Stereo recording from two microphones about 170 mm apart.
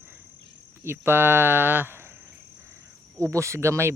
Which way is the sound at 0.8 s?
15° right (ahead or behind).